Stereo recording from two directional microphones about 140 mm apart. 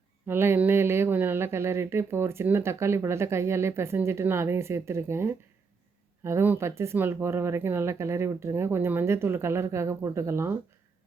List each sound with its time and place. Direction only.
0.3 s speech: 15° right (ahead or behind)